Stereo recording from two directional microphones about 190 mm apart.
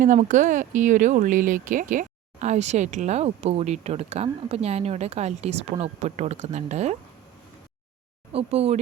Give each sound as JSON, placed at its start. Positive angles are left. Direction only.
{"t": 0.0, "sound": "speech", "side_deg": -40}
{"t": 8.3, "sound": "speech", "side_deg": -30}